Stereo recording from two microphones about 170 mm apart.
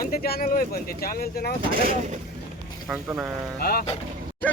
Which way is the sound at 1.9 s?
45° right (ahead or behind).